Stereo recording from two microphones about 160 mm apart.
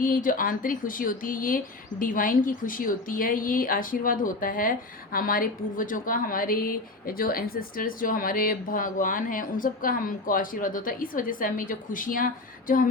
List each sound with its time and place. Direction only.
0.0 s a woman's voice: 60° left (ahead or behind)